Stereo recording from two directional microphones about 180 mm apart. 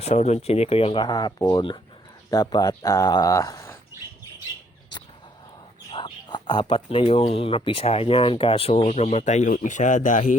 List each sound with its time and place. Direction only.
0.0 s speech: 40° left (ahead or behind)
1.0 s speech: 20° left (ahead or behind)
5.9 s speech: 25° left (ahead or behind); by 10.3 s 45° left (ahead or behind)